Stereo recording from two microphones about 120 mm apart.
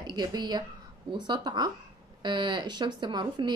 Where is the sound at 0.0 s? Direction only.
35° right (ahead or behind).